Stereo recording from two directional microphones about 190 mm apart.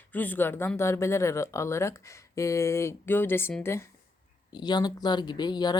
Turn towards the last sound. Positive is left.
turn(degrees=20)  # may be behind; listen again after turning